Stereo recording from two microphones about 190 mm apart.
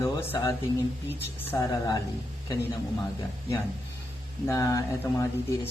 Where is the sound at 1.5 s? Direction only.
15° left (ahead or behind).